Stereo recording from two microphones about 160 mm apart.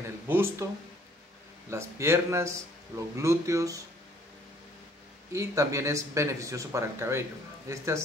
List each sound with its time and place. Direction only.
0.3 s speech: 15° right (ahead or behind)
1.7 s speech: 15° right (ahead or behind)
5.3 s speech: 20° right (ahead or behind)